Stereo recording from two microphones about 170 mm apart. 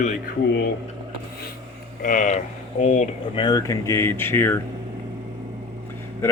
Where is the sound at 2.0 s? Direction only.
50° left (ahead or behind).